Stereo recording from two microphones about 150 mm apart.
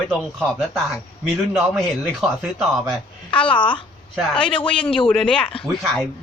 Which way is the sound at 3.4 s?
35° left (ahead or behind).